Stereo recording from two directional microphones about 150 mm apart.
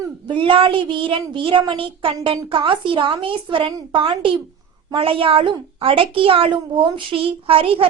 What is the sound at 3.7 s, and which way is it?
Speech, 20° right (ahead or behind).